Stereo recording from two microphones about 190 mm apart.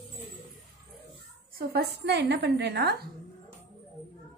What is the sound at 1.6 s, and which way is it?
A woman's voice, 55° right (ahead or behind).